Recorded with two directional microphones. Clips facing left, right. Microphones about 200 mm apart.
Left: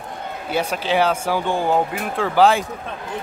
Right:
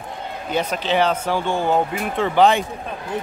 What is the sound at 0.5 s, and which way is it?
Speech, 10° left (ahead or behind).